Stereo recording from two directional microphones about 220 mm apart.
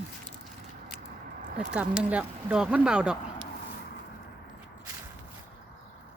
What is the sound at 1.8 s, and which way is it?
Speech, 5° right (ahead or behind).